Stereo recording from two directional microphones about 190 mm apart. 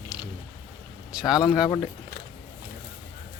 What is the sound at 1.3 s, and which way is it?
Speech, 20° left (ahead or behind).